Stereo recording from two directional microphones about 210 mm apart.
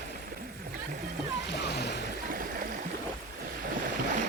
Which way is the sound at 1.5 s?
50° left (ahead or behind).